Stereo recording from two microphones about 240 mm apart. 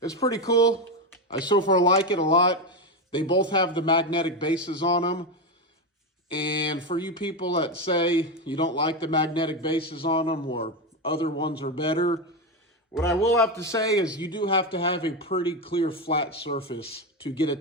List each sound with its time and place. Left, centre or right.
0.0 s a man's voice: centre
6.3 s speech: left
13.1 s a man's voice: centre